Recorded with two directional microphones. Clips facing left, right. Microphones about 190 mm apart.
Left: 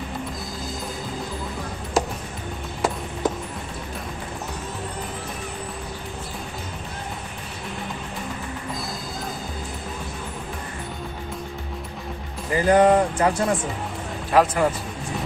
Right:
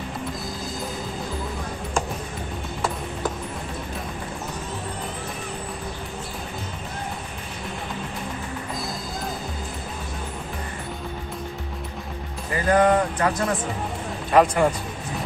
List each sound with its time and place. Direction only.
12.5 s speech: 30° left (ahead or behind)
14.3 s speech: centre (ahead or behind)